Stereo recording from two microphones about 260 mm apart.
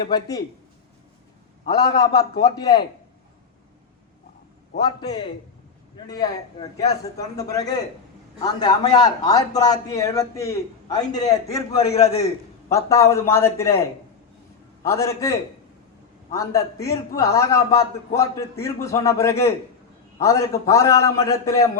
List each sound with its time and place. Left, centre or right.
0.1 s a man's voice: centre
1.6 s a man's voice: centre
4.8 s a man's voice: centre
11.9 s a man's voice: left
12.7 s a man's voice: centre
14.8 s a man's voice: centre